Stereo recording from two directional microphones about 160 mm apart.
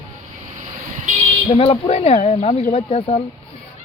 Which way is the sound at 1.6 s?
35° left (ahead or behind).